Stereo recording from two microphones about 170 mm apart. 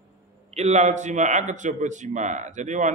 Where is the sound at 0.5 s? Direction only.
40° right (ahead or behind).